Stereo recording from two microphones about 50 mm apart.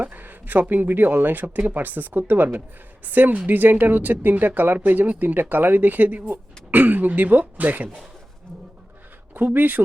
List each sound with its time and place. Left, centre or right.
0.0 s speech: right
9.3 s speech: right